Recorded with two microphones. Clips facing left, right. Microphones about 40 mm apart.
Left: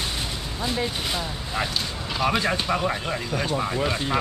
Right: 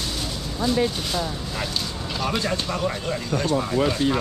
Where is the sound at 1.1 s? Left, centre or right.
Centre.